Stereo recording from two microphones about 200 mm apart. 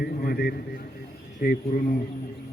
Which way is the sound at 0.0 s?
50° left (ahead or behind).